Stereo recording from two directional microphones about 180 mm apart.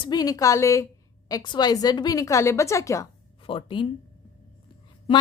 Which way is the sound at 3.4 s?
30° left (ahead or behind).